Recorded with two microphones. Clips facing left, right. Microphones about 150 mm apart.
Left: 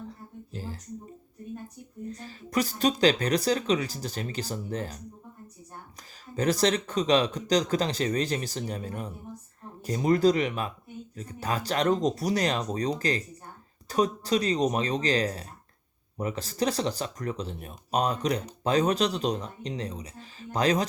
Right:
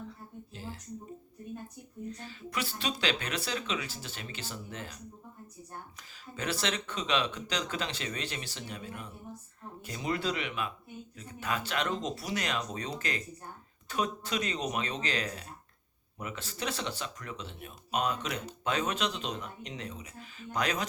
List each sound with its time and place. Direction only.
0.5 s speech: 40° left (ahead or behind)
2.0 s speech: 40° left (ahead or behind)
6.3 s speech: 40° left (ahead or behind)